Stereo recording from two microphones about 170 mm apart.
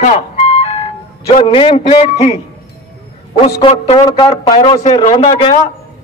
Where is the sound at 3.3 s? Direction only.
35° left (ahead or behind).